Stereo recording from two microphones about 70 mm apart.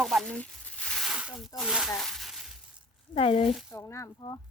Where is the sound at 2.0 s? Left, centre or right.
Centre.